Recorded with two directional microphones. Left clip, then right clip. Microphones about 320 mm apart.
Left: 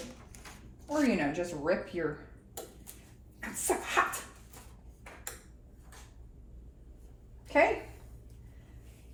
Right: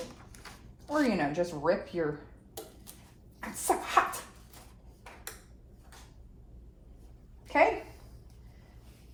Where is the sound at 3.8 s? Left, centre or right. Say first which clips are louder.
Right 2 dB; centre.